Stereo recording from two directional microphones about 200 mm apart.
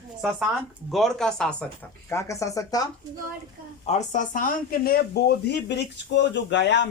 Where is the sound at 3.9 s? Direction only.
35° left (ahead or behind).